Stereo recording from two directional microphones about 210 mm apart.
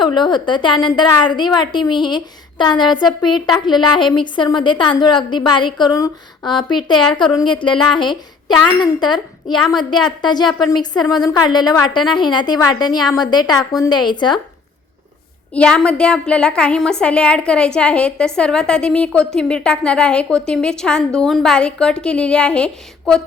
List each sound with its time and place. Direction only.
0.0 s a woman's voice: 20° left (ahead or behind)
15.5 s a woman's voice: 5° left (ahead or behind)